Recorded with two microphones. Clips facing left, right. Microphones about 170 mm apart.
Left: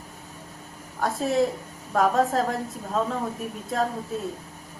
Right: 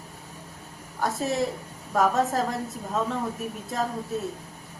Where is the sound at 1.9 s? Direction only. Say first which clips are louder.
Left 1 dB; 5° right (ahead or behind).